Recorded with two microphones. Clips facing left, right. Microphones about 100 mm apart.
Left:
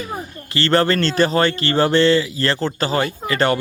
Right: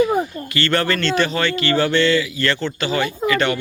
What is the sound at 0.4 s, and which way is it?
A man's voice, 30° left (ahead or behind).